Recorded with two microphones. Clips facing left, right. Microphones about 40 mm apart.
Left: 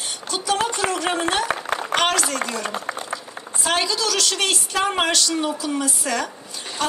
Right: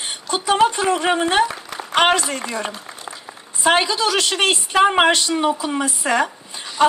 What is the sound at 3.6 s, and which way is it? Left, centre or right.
A woman's voice, right.